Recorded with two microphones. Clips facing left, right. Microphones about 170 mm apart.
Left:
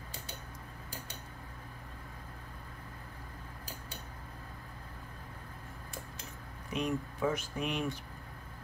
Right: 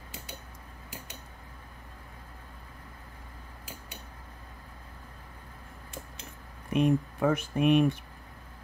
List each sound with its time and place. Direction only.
6.7 s speech: 60° right (ahead or behind)